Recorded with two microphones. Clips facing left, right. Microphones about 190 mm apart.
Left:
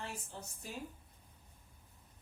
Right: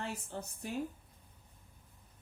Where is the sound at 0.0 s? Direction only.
60° right (ahead or behind).